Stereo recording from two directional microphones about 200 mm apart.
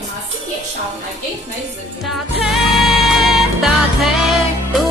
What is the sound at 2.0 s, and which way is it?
Music, centre (ahead or behind).